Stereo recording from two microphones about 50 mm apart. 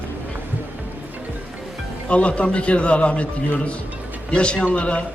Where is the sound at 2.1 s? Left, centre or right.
Left.